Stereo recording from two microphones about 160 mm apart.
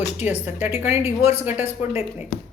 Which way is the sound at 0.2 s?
10° right (ahead or behind).